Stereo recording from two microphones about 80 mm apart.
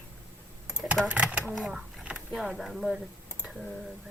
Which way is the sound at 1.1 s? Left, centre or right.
Centre.